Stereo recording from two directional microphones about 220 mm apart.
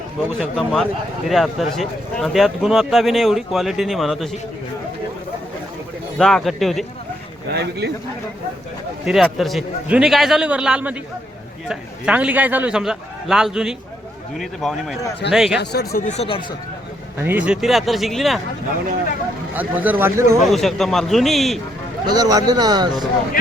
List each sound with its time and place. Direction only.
0.3 s a man's voice: centre (ahead or behind)
6.1 s a man's voice: centre (ahead or behind)
7.5 s speech: 50° right (ahead or behind)
9.0 s a man's voice: centre (ahead or behind)
15.6 s speech: 45° left (ahead or behind); by 16.6 s 25° left (ahead or behind)
17.2 s a man's voice: 5° right (ahead or behind)
19.5 s a man's voice: 10° right (ahead or behind)
20.5 s a man's voice: centre (ahead or behind)
22.0 s a man's voice: 15° right (ahead or behind)